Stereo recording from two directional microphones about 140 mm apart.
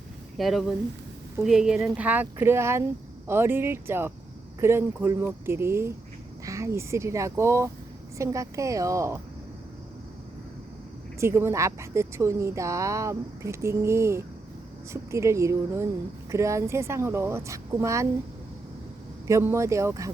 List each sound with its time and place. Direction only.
0.3 s a woman's voice: centre (ahead or behind); by 9.2 s 20° right (ahead or behind)
11.2 s a woman's voice: 20° right (ahead or behind)
19.3 s a woman's voice: 20° right (ahead or behind)